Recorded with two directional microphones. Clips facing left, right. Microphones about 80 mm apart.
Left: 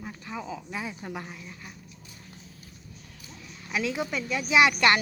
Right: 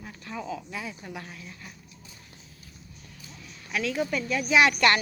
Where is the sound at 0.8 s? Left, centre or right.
Left.